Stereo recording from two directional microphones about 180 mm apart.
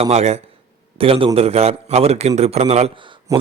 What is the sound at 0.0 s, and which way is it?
A man's voice, 35° right (ahead or behind).